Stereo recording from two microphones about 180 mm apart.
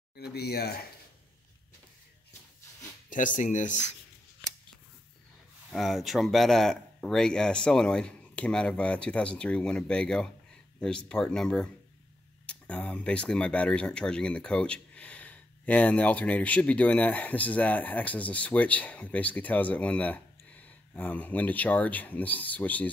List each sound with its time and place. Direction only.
0.1 s speech: 65° left (ahead or behind)
3.1 s speech: 45° left (ahead or behind)
5.7 s speech: centre (ahead or behind)